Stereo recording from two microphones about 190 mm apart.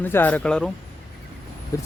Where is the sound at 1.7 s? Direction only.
15° left (ahead or behind).